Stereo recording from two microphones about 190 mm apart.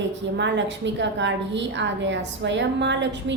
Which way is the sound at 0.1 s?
70° right (ahead or behind).